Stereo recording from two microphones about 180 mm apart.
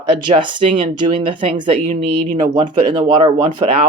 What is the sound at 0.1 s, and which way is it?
Speech, 25° right (ahead or behind).